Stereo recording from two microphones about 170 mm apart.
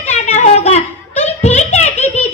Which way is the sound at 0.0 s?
45° left (ahead or behind).